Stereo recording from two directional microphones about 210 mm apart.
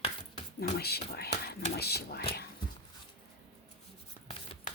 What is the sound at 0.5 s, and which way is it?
Speech, 50° left (ahead or behind).